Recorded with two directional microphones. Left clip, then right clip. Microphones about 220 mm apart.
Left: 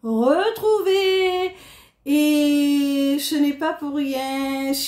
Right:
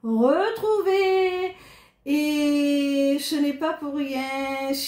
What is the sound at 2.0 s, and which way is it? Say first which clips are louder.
Speech: left 5 dB; 40° left (ahead or behind).